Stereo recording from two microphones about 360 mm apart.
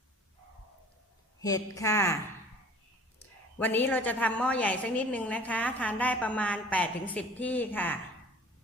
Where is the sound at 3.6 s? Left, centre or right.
Centre.